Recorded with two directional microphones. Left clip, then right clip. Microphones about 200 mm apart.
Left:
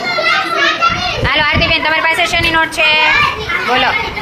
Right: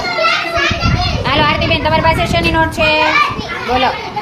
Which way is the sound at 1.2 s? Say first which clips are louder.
Left 1 dB; 25° right (ahead or behind).